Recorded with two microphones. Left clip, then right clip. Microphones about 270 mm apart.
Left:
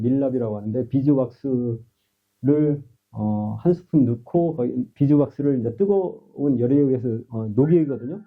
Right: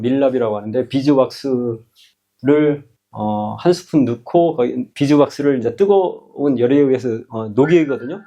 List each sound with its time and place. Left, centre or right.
0.0 s speech: centre
1.5 s speech: centre
3.2 s speech: right
3.6 s speech: centre
6.0 s speech: right
6.4 s speech: centre